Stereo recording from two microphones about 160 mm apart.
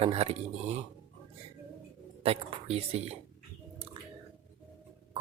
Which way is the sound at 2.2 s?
40° right (ahead or behind).